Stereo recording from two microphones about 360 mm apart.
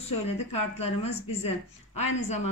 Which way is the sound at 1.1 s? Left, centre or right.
Left.